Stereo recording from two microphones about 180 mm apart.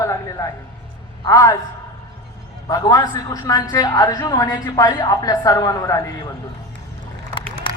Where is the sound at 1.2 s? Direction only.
20° left (ahead or behind).